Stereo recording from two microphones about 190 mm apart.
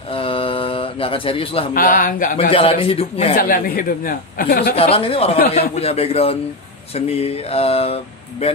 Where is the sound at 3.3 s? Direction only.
50° left (ahead or behind).